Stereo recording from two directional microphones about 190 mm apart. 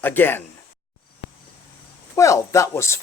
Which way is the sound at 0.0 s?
10° left (ahead or behind).